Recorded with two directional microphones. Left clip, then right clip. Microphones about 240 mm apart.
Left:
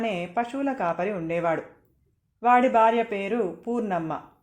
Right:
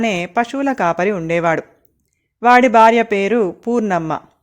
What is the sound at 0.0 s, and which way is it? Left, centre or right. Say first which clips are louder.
Speech: right 9 dB; right.